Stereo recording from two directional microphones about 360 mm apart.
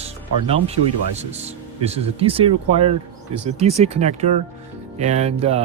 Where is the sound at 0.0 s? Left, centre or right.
Centre.